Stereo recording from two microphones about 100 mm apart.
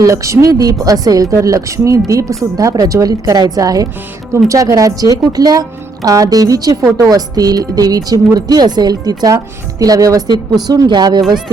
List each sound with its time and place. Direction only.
0.0 s speech: 30° right (ahead or behind); by 11.5 s 50° right (ahead or behind)